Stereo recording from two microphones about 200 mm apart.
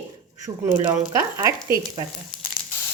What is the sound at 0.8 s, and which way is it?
Speech, 15° right (ahead or behind).